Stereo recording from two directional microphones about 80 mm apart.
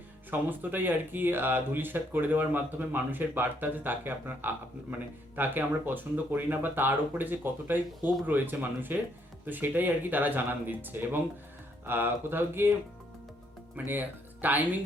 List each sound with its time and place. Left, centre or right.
0.3 s speech: right
13.7 s speech: right